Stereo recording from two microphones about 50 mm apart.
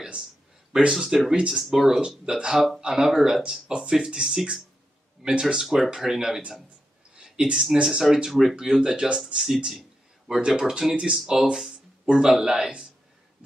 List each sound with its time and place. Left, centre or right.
0.9 s speech: centre
1.3 s speech: right
1.6 s speech: centre
2.0 s speech: centre
2.9 s speech: centre
3.4 s speech: centre
7.2 s a sound: centre
7.6 s speech: centre
9.7 s a sound: centre
10.7 s speech: centre